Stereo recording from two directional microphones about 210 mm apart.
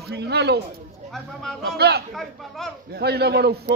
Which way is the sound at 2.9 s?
50° right (ahead or behind).